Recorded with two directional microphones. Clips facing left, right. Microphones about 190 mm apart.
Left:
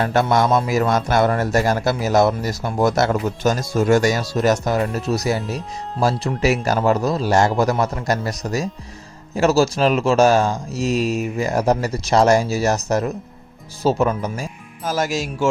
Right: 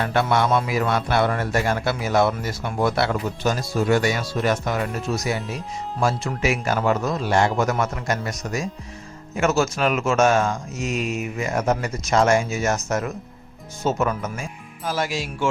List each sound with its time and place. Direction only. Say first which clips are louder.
0.0 s speech: left 3 dB; 40° left (ahead or behind)
14.8 s speech: left 4 dB; 45° left (ahead or behind)